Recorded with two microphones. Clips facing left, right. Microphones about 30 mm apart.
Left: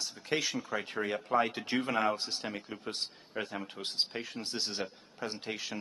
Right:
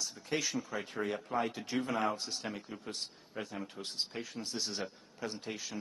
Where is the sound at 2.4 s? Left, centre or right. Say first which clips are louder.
Left 3 dB; left.